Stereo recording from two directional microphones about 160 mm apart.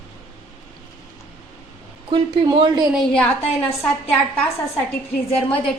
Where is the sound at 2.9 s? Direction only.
5° left (ahead or behind).